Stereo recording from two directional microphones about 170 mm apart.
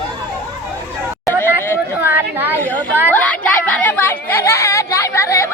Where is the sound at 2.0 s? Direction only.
10° right (ahead or behind).